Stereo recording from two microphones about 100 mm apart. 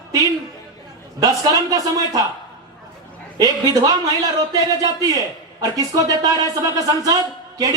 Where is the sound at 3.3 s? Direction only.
35° right (ahead or behind).